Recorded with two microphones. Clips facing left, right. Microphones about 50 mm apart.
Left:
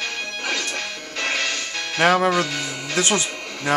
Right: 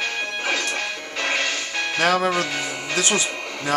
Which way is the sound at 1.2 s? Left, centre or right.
Centre.